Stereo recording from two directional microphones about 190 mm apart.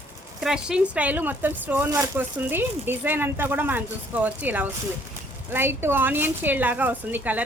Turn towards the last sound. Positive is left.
turn(degrees=-10)  # may be behind; listen again after turning